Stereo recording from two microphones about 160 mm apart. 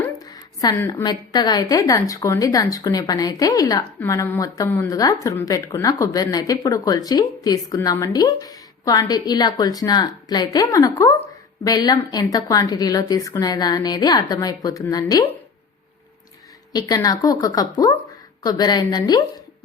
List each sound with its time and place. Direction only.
0.6 s a woman's voice: 25° left (ahead or behind)
16.7 s a woman's voice: 25° left (ahead or behind)